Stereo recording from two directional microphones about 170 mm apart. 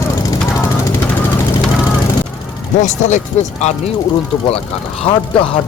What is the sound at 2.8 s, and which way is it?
Speech, 45° left (ahead or behind).